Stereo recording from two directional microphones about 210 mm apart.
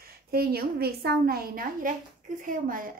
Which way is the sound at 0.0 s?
45° right (ahead or behind).